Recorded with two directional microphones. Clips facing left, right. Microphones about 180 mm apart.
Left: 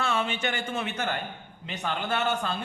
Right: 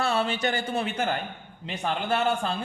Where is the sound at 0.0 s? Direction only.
35° right (ahead or behind).